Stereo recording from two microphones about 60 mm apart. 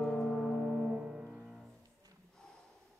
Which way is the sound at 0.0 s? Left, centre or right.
Centre.